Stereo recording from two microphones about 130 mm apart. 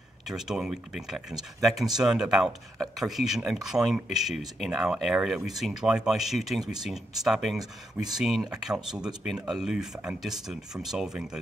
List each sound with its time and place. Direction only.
0.3 s speech: 5° right (ahead or behind)